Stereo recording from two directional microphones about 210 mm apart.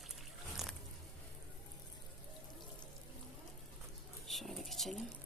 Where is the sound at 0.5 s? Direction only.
Centre (ahead or behind).